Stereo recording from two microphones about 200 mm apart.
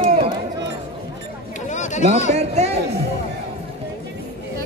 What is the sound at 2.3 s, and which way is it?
Speech, 35° right (ahead or behind).